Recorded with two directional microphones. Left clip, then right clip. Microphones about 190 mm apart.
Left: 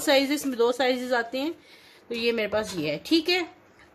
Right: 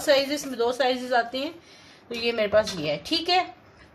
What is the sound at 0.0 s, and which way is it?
A woman's voice, 35° left (ahead or behind).